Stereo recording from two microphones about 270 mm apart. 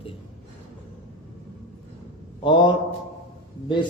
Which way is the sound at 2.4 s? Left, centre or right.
Centre.